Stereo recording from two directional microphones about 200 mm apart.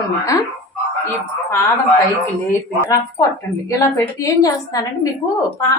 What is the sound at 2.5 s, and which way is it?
A woman's voice, 15° left (ahead or behind).